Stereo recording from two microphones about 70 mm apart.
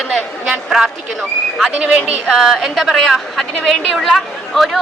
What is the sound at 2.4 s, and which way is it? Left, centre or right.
A woman's voice, centre.